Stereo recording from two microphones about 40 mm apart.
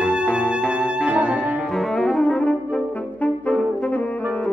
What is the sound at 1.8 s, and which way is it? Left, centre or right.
Saxophone, centre.